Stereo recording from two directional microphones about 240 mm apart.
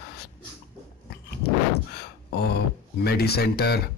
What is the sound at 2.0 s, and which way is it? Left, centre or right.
Speech, left.